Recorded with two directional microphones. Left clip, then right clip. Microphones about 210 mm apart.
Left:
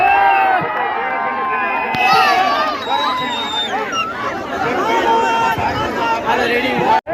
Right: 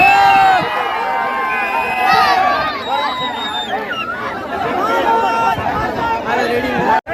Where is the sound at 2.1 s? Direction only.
10° right (ahead or behind).